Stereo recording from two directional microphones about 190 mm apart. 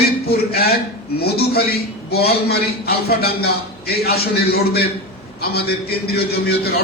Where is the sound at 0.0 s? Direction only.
55° left (ahead or behind).